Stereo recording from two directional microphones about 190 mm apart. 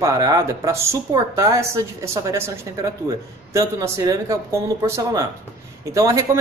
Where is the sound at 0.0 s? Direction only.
20° right (ahead or behind).